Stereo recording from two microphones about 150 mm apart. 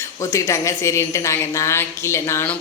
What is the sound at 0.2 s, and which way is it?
Speech, 20° left (ahead or behind).